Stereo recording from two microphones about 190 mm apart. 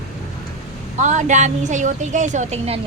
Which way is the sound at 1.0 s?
40° right (ahead or behind).